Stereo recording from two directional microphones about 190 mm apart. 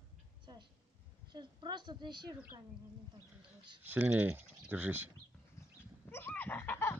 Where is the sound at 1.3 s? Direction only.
25° right (ahead or behind).